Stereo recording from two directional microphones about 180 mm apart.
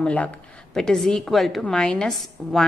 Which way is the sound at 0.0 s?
5° left (ahead or behind).